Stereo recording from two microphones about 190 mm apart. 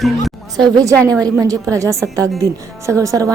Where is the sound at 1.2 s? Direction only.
20° right (ahead or behind).